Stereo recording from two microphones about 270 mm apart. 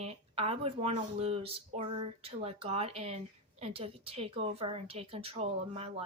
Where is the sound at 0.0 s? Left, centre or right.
Right.